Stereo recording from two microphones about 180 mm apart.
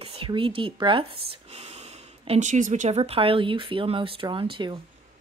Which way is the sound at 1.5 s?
35° right (ahead or behind).